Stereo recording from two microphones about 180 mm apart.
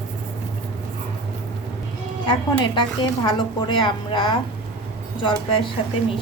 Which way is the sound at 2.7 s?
25° left (ahead or behind).